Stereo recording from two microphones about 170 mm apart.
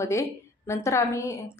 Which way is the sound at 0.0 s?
15° left (ahead or behind).